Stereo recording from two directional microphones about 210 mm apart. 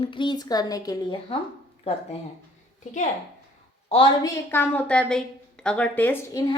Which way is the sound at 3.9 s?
25° left (ahead or behind).